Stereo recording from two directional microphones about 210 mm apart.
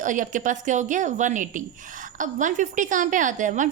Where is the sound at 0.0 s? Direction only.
35° right (ahead or behind).